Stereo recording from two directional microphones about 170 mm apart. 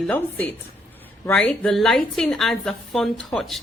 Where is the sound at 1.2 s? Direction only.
5° left (ahead or behind).